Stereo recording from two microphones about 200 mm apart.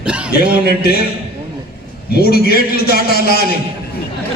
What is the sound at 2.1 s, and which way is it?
A man's voice, 50° left (ahead or behind).